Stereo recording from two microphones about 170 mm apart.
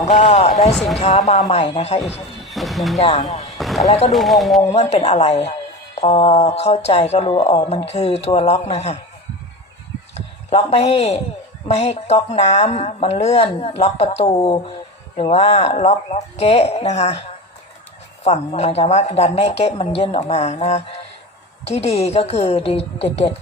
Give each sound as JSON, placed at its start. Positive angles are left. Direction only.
{"t": 0.2, "sound": "speech", "side_deg": 40}
{"t": 2.4, "sound": "a sound", "side_deg": 0}
{"t": 3.0, "sound": "speech", "side_deg": 40}
{"t": 3.6, "sound": "a sound", "side_deg": 0}
{"t": 3.8, "sound": "speech", "side_deg": 40}
{"t": 4.1, "sound": "speech", "side_deg": 0}
{"t": 4.7, "sound": "speech", "side_deg": 40}
{"t": 10.2, "sound": "speech", "side_deg": 40}